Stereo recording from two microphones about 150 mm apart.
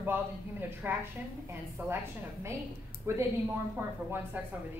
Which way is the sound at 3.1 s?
20° right (ahead or behind).